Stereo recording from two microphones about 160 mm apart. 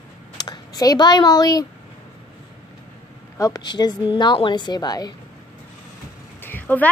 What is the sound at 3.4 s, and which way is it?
A woman's voice, 25° left (ahead or behind).